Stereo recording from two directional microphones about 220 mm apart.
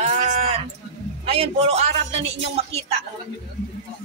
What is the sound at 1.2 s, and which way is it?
A man's voice, 30° right (ahead or behind).